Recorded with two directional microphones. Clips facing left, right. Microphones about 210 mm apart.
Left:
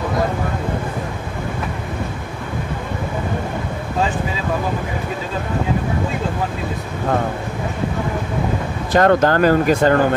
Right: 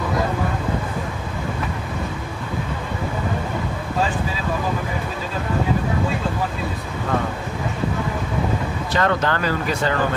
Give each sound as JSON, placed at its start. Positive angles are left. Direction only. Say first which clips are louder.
{"t": 8.9, "sound": "speech", "louder": "left 7 dB", "side_deg": 45}